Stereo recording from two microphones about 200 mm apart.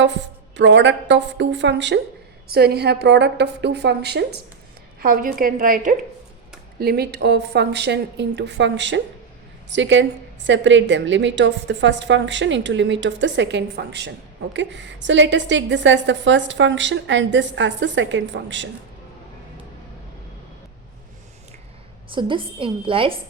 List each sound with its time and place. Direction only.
0.5 s a woman's voice: 65° right (ahead or behind)
22.1 s a woman's voice: 25° right (ahead or behind)